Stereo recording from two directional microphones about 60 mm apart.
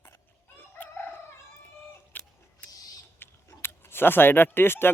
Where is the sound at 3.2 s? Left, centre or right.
Left.